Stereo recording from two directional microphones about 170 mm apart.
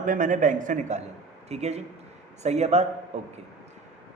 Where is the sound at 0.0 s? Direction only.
50° right (ahead or behind).